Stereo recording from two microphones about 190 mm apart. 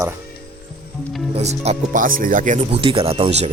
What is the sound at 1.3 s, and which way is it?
Speech, 35° right (ahead or behind).